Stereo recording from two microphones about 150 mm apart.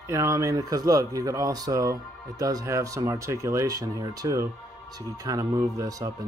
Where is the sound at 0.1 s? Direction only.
20° right (ahead or behind).